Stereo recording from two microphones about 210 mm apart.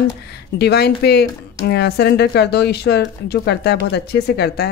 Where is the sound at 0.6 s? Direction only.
50° left (ahead or behind).